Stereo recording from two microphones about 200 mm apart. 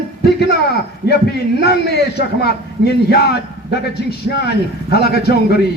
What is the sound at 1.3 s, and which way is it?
A man's voice, 55° left (ahead or behind).